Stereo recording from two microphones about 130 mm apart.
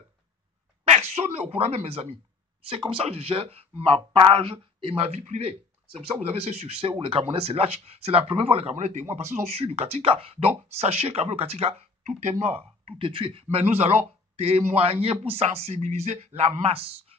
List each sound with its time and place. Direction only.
0.9 s speech: 55° right (ahead or behind)
8.7 s speech: 65° right (ahead or behind)
9.3 s speech: 50° right (ahead or behind)